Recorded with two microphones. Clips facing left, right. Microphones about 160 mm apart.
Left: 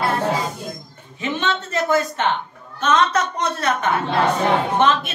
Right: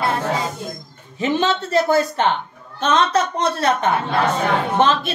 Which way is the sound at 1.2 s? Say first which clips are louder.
Right 4 dB; 35° right (ahead or behind).